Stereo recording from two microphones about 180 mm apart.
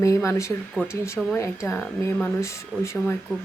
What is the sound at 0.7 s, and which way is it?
Speech, 5° right (ahead or behind).